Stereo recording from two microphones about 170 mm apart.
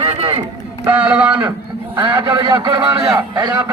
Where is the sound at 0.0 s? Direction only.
35° right (ahead or behind).